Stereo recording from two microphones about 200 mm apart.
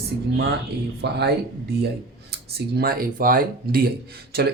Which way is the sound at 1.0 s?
55° right (ahead or behind).